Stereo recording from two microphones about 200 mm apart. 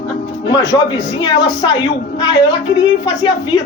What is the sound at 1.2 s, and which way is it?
Speech, 25° left (ahead or behind).